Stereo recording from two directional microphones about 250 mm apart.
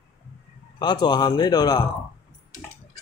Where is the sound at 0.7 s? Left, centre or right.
Centre.